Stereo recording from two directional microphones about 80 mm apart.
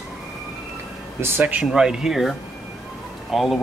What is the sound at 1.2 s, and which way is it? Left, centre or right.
Speech, right.